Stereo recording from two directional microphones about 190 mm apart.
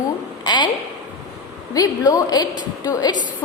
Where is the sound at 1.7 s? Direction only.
20° left (ahead or behind).